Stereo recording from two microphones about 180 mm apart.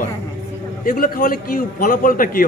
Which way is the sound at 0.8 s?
50° left (ahead or behind).